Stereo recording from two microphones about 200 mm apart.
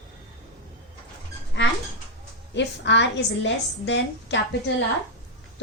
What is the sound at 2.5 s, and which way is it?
A woman's voice, 60° left (ahead or behind).